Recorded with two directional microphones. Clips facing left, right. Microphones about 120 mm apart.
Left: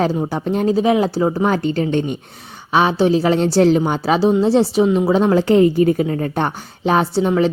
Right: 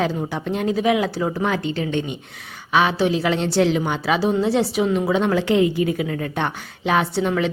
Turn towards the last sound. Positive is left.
turn(degrees=35)  # may be behind; listen again after turning